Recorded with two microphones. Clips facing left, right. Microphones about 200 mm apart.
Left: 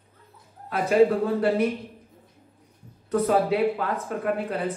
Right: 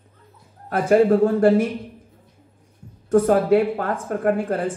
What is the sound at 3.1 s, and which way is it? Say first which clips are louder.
Speech: right 6 dB; 50° right (ahead or behind).